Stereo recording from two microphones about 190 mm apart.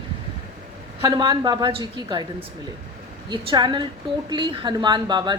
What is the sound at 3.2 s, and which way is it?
Speech, 25° right (ahead or behind).